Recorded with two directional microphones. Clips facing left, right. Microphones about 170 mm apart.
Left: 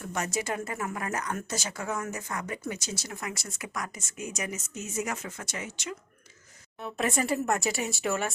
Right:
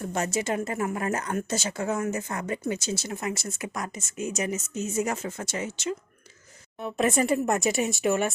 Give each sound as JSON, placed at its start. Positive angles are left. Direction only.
{"t": 0.0, "sound": "a woman's voice", "side_deg": -30}